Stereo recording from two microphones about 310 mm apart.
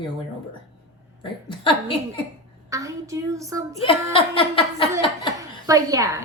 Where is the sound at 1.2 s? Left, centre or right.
Centre.